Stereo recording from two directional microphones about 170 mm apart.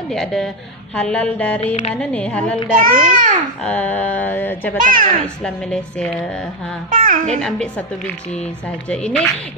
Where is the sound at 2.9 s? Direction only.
55° right (ahead or behind).